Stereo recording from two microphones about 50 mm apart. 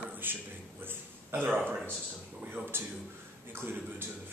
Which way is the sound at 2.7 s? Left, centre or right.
Right.